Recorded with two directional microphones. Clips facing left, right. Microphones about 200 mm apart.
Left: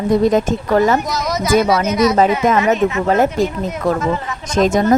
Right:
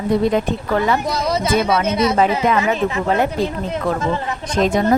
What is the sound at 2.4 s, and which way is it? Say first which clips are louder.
Speech: left 3 dB; 45° left (ahead or behind).